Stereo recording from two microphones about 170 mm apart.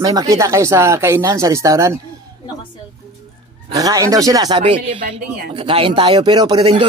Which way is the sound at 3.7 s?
20° right (ahead or behind).